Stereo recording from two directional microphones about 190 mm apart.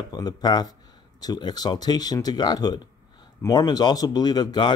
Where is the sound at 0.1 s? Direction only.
20° left (ahead or behind).